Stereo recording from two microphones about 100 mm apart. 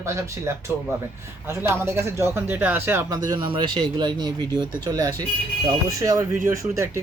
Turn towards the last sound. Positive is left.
turn(degrees=-25)  # may be behind; listen again after turning